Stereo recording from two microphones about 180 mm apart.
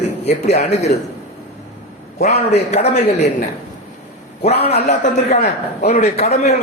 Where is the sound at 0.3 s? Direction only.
40° left (ahead or behind).